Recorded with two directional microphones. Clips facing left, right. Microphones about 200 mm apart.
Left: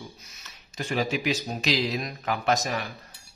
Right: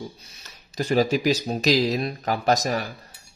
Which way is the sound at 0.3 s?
35° right (ahead or behind).